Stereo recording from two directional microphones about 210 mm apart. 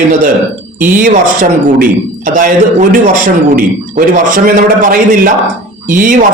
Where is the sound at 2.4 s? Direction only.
40° right (ahead or behind).